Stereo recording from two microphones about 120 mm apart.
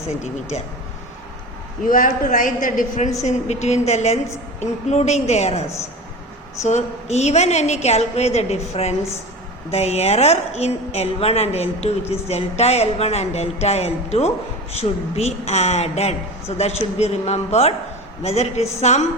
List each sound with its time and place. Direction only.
1.8 s a woman's voice: 90° left
3.2 s a woman's voice: 70° left (ahead or behind)
6.7 s speech: 70° left (ahead or behind)